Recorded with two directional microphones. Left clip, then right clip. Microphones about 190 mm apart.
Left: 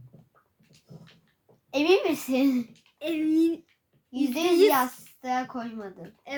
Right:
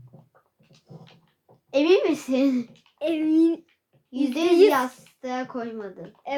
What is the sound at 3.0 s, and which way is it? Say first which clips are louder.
Speech: right 4 dB; 15° left (ahead or behind).